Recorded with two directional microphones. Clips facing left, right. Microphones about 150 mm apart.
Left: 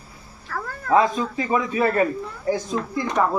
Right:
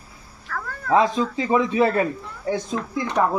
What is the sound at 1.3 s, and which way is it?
Speech, 25° right (ahead or behind).